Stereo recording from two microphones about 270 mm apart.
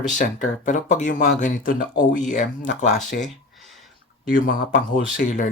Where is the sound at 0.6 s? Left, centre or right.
Left.